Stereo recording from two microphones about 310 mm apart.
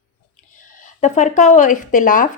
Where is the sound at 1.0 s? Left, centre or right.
Left.